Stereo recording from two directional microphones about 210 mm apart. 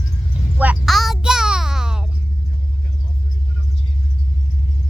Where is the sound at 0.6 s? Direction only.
5° right (ahead or behind).